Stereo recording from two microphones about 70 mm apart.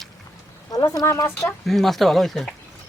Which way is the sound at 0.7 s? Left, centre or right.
Left.